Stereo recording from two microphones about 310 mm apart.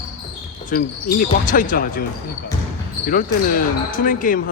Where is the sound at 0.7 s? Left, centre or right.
Left.